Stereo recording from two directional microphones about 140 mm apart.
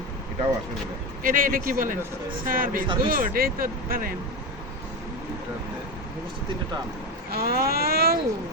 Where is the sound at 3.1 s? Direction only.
90° right.